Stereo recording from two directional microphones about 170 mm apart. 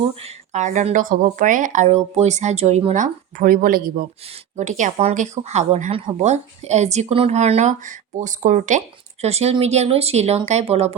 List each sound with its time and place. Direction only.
0.2 s speech: 40° right (ahead or behind); by 4.0 s 55° right (ahead or behind)
4.5 s speech: 45° right (ahead or behind)